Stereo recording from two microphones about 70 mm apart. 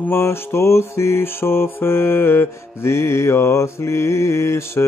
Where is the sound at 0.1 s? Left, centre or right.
Left.